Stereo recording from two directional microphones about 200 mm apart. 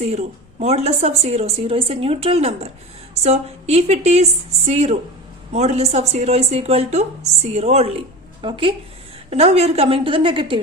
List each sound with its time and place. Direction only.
0.0 s a woman's voice: 30° right (ahead or behind)